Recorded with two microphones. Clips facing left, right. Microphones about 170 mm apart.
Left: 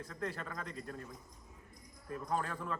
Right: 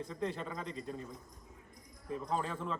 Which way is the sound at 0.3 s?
20° right (ahead or behind).